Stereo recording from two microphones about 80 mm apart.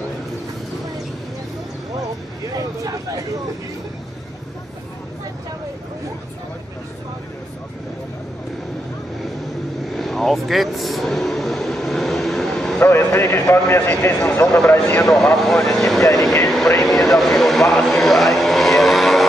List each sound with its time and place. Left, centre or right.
9.9 s vehicle: centre
12.7 s a man's voice: left
15.3 s speech: centre
16.0 s vehicle: left
16.8 s speech: centre
17.8 s vehicle: centre